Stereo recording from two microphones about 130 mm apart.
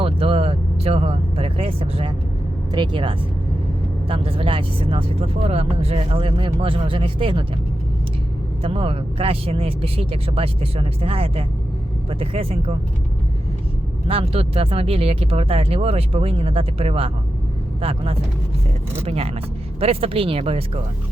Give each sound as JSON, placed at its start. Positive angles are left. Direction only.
{"t": 0.0, "sound": "speech", "side_deg": -45}
{"t": 8.6, "sound": "speech", "side_deg": -45}
{"t": 14.1, "sound": "speech", "side_deg": -45}